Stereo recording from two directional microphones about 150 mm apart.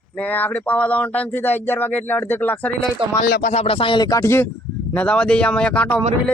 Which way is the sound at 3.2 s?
80° left.